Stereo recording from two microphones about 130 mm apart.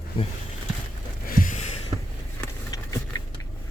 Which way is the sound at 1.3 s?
90° left.